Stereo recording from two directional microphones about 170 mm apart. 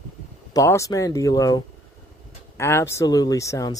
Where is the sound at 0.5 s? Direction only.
20° left (ahead or behind).